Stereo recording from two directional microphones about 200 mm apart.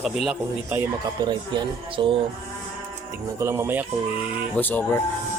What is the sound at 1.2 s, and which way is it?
Speech, 25° right (ahead or behind).